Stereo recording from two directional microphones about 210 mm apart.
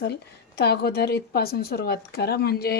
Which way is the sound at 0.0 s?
55° left (ahead or behind).